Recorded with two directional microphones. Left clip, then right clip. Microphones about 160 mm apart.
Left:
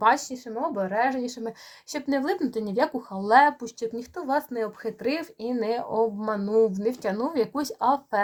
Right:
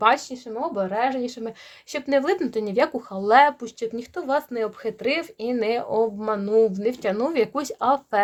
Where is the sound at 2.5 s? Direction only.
35° right (ahead or behind).